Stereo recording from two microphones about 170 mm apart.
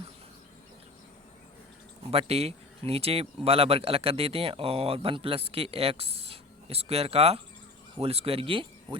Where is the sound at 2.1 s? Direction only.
35° right (ahead or behind).